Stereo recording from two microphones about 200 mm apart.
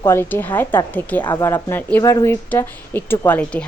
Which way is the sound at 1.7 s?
10° left (ahead or behind).